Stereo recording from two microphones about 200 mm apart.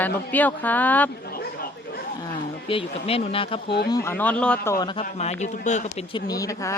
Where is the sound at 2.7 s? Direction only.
30° left (ahead or behind).